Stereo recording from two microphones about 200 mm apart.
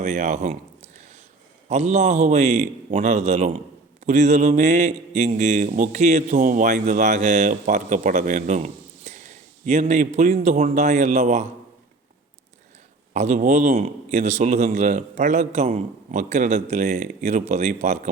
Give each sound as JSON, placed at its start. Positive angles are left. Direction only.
{"t": 0.0, "sound": "a sound", "side_deg": -35}
{"t": 1.7, "sound": "a man's voice", "side_deg": -35}
{"t": 13.1, "sound": "a man's voice", "side_deg": -35}